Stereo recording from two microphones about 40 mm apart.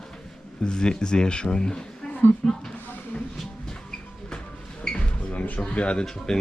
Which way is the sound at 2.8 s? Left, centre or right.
Left.